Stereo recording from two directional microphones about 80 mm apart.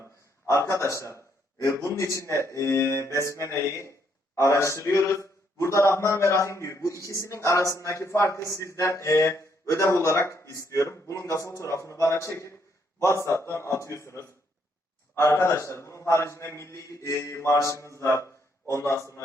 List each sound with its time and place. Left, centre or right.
0.4 s a man's voice: left